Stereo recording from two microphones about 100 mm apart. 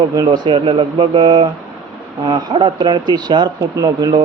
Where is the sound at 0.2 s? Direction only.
55° right (ahead or behind).